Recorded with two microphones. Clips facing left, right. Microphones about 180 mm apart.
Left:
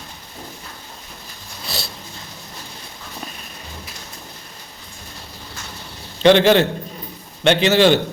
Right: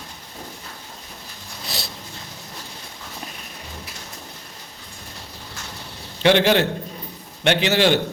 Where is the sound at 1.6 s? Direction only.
20° right (ahead or behind).